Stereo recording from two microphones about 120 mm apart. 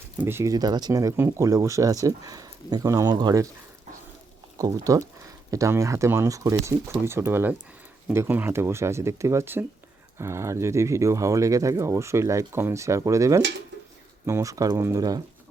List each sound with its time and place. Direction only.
0.2 s speech: 20° right (ahead or behind)
0.5 s speech: 35° right (ahead or behind)
4.5 s speech: 30° right (ahead or behind)